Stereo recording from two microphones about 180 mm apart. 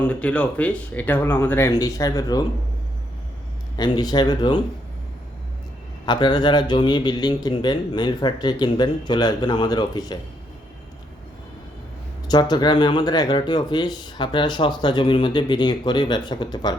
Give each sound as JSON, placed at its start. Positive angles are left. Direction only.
{"t": 0.0, "sound": "speech", "side_deg": 5}
{"t": 3.8, "sound": "speech", "side_deg": 25}
{"t": 6.1, "sound": "speech", "side_deg": 25}
{"t": 12.3, "sound": "speech", "side_deg": 25}